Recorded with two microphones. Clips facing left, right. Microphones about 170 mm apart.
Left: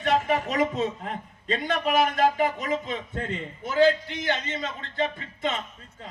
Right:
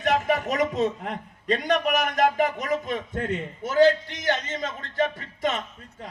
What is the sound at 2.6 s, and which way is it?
A man's voice, 45° right (ahead or behind).